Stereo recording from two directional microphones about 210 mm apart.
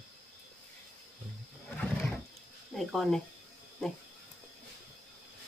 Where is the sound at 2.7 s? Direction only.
Centre (ahead or behind).